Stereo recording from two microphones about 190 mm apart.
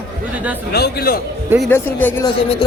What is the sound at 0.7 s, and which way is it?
Speech, 55° left (ahead or behind).